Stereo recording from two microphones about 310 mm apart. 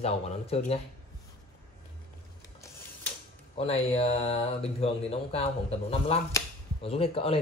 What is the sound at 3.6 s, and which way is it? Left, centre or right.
Speech, centre.